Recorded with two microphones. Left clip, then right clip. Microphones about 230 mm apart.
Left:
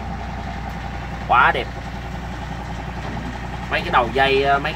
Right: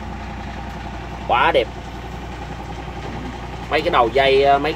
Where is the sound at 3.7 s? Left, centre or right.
Centre.